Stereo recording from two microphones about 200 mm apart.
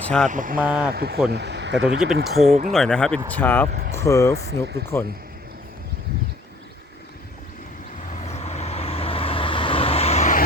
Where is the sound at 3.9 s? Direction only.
15° left (ahead or behind).